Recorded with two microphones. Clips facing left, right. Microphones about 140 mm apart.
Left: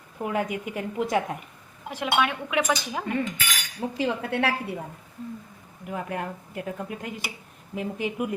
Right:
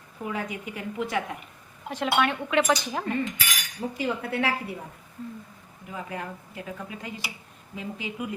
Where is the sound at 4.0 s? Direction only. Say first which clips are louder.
Left 2 dB; 80° left.